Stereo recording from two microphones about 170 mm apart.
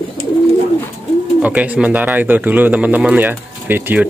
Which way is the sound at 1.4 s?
10° right (ahead or behind).